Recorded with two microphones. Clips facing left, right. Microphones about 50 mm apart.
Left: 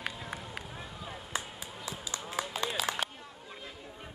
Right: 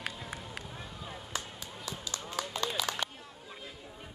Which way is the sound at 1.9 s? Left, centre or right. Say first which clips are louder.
Even; left.